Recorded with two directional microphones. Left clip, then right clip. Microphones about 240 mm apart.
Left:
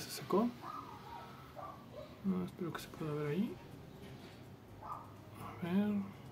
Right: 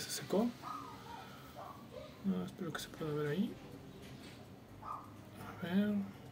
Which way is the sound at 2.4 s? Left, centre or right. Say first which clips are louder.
Even; left.